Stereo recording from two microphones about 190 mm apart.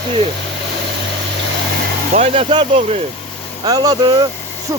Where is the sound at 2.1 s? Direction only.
35° right (ahead or behind).